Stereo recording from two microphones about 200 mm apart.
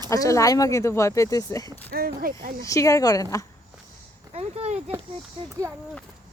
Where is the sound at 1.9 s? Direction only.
50° right (ahead or behind).